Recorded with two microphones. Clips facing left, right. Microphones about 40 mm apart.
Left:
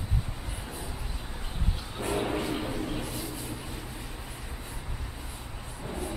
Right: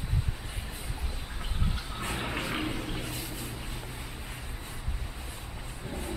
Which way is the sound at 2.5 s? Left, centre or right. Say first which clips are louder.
Left 1 dB; right.